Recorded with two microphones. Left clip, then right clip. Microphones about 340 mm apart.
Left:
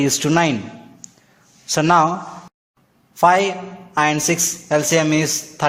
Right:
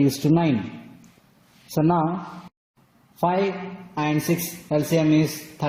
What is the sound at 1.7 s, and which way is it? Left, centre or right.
Speech, left.